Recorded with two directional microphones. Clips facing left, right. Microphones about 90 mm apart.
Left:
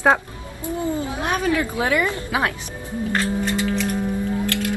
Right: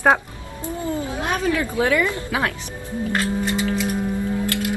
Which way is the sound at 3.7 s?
10° right (ahead or behind).